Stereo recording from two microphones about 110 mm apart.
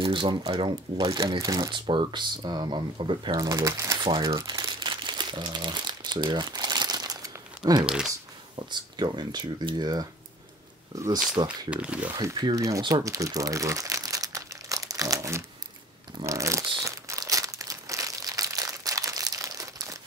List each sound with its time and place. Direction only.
0.0 s speech: 50° right (ahead or behind)
1.0 s speech: 30° right (ahead or behind)
1.7 s speech: 45° right (ahead or behind)
3.3 s crumpling: 30° right (ahead or behind)
7.8 s speech: 5° right (ahead or behind)
8.5 s speech: 40° right (ahead or behind)
11.4 s speech: 45° right (ahead or behind)
11.7 s speech: 10° right (ahead or behind)
12.2 s speech: 35° right (ahead or behind)
12.8 s crumpling: 30° right (ahead or behind)